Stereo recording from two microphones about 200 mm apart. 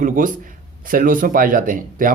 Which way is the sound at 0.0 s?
40° right (ahead or behind).